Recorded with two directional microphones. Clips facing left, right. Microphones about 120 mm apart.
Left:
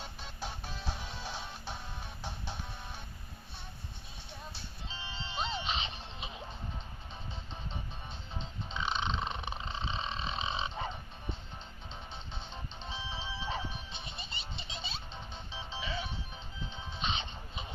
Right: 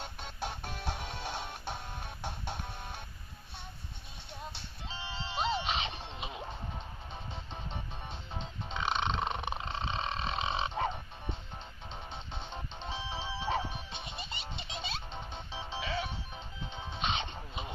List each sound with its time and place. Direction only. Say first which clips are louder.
0.0 s music: right 3 dB; 60° right (ahead or behind)
4.9 s music: right 4 dB; 40° right (ahead or behind)
5.6 s music: right 2 dB; 50° right (ahead or behind)
8.7 s a sound: right 2 dB; 50° right (ahead or behind)
12.8 s music: right 3 dB; 50° right (ahead or behind)
15.5 s music: right 3 dB; 50° right (ahead or behind)